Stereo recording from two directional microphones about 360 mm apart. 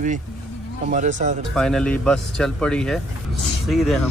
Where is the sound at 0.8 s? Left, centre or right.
Centre.